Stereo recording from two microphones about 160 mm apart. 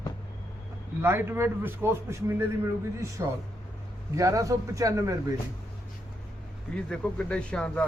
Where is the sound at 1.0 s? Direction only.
15° right (ahead or behind).